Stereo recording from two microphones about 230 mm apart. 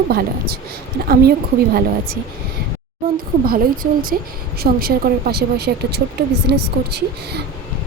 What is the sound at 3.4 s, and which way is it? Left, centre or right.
Speech, right.